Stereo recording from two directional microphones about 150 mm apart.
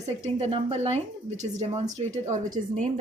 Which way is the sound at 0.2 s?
45° right (ahead or behind).